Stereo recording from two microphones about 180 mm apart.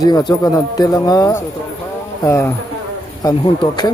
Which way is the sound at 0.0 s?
20° left (ahead or behind).